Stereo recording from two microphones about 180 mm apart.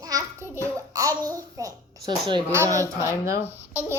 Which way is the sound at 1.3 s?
20° right (ahead or behind).